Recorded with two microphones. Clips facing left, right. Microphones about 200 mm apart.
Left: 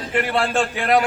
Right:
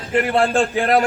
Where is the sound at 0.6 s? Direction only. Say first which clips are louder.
Right 2 dB; 40° right (ahead or behind).